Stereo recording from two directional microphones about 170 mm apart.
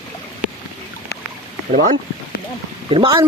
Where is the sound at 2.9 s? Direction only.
30° right (ahead or behind).